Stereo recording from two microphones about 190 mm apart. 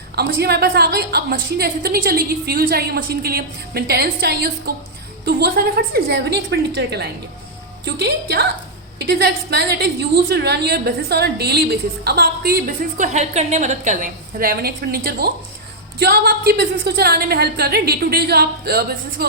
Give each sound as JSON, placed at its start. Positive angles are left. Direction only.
{"t": 0.2, "sound": "a woman's voice", "side_deg": -55}